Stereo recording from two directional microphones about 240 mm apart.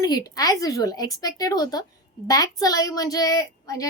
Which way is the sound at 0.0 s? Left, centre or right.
Centre.